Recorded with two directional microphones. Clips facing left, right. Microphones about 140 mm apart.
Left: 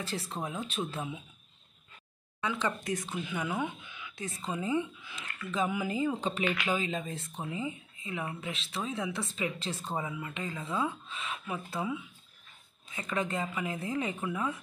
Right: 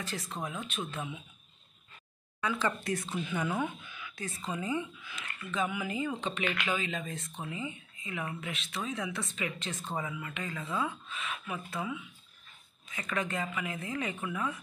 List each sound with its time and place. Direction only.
0.0 s speech: 30° left (ahead or behind)
2.4 s speech: 20° left (ahead or behind)
6.4 s speech: 10° left (ahead or behind)
6.7 s speech: 35° left (ahead or behind)